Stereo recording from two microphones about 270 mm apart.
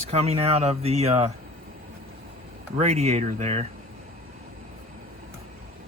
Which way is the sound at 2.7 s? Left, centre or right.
Right.